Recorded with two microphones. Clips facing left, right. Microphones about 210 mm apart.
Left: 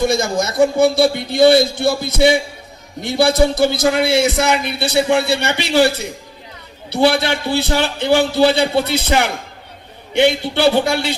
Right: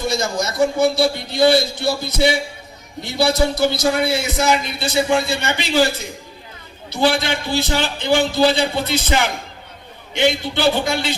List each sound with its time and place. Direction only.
0.2 s a man's voice: 50° left (ahead or behind)
4.0 s a man's voice: 85° left; by 5.8 s 65° left (ahead or behind)
6.9 s a man's voice: 65° left (ahead or behind)